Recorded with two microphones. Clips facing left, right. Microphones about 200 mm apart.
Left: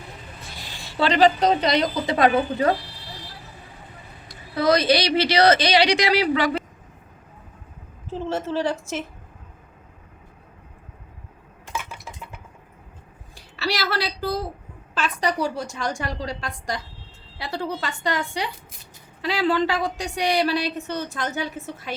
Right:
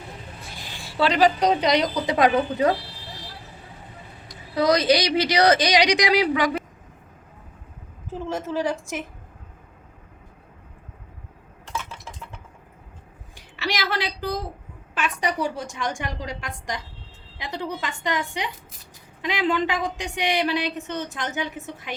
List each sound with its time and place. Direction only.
0.9 s a woman's voice: 5° right (ahead or behind)
4.3 s a woman's voice: 15° right (ahead or behind)
8.3 s a woman's voice: 15° right (ahead or behind)
11.7 s a sound: 10° left (ahead or behind)
13.8 s a sound: 15° right (ahead or behind)
15.2 s a woman's voice: 35° left (ahead or behind)
17.3 s a woman's voice: 20° right (ahead or behind)
19.8 s a woman's voice: 35° left (ahead or behind)
20.4 s a woman's voice: 20° right (ahead or behind)